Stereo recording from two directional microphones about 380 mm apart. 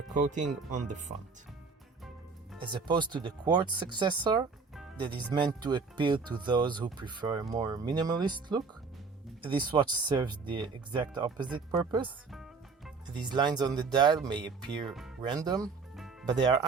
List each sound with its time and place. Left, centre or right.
0.1 s speech: centre
2.6 s speech: centre
12.3 s music: centre
13.1 s speech: centre
14.8 s speech: centre
15.2 s speech: centre